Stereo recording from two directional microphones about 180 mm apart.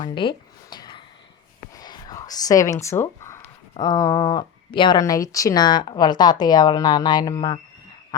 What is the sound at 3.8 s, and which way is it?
Speech, 20° left (ahead or behind).